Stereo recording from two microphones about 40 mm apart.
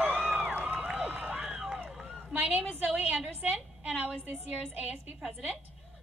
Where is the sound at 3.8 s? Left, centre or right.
Right.